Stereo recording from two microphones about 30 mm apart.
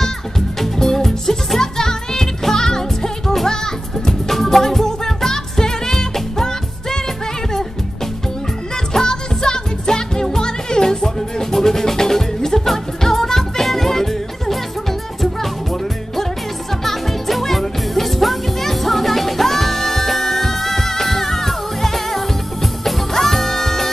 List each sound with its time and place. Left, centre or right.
0.6 s music: centre
4.1 s music: centre
8.9 s music: left